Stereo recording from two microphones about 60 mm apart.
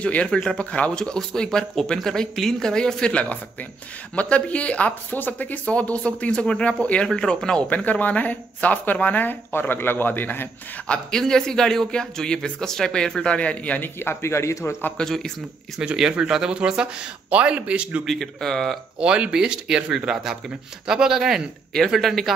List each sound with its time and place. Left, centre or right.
0.0 s speech: centre
0.7 s speech: left
7.7 s speech: left
10.9 s speech: centre
13.9 s speech: left
15.0 s speech: centre
15.8 s a man's voice: centre
18.0 s speech: centre
18.9 s speech: centre